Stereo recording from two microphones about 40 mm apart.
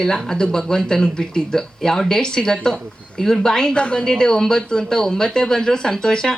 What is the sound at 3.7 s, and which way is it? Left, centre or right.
Speech, left.